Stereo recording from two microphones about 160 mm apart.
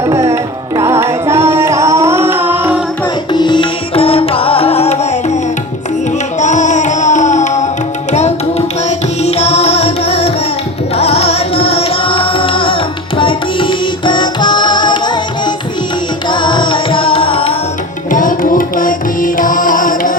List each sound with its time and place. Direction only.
0.0 s music: 20° right (ahead or behind)
3.3 s music: 30° left (ahead or behind)
6.4 s music: 50° left (ahead or behind)
18.1 s music: 55° left (ahead or behind)